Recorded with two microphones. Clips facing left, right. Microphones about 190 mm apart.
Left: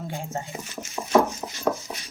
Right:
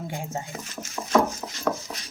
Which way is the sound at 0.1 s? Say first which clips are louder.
Even; 15° right (ahead or behind).